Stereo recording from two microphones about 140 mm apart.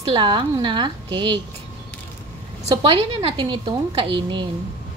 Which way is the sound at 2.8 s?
40° right (ahead or behind).